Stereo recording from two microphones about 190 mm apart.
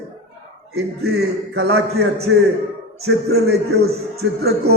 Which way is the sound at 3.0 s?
60° right (ahead or behind).